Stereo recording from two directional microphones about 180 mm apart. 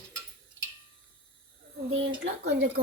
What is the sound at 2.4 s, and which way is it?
Speech, 70° right (ahead or behind).